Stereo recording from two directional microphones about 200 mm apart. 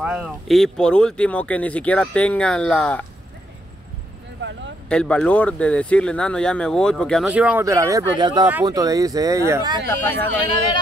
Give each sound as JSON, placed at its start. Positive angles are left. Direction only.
{"t": 0.0, "sound": "speech", "side_deg": -5}
{"t": 4.4, "sound": "a sound", "side_deg": -65}
{"t": 4.8, "sound": "speech", "side_deg": 5}
{"t": 9.8, "sound": "speech", "side_deg": 10}